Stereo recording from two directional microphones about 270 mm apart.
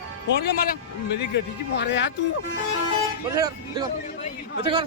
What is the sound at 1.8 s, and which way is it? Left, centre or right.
Speech, left.